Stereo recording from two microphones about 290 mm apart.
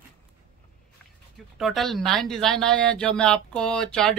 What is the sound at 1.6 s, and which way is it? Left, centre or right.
Speech, centre.